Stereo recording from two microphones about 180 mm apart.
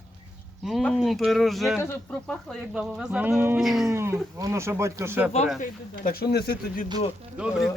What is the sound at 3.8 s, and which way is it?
Speech, 15° right (ahead or behind).